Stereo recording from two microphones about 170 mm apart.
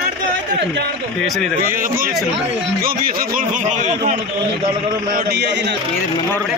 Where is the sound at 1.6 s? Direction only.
55° right (ahead or behind).